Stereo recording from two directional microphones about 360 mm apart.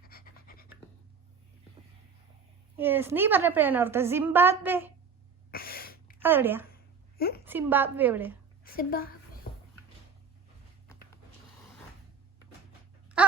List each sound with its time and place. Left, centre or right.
0.0 s pant: left
2.7 s a woman's voice: centre
5.5 s a sound: left
6.2 s a woman's voice: centre
7.2 s a woman's voice: left
7.4 s a woman's voice: centre
8.6 s a woman's voice: left
9.5 s a sound: left
13.2 s a sound: centre